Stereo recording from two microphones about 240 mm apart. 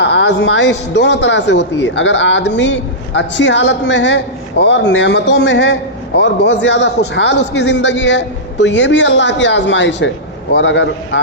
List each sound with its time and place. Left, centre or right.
0.0 s a man's voice: left